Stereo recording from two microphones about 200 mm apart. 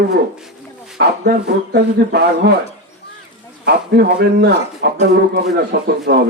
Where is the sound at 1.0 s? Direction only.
60° right (ahead or behind).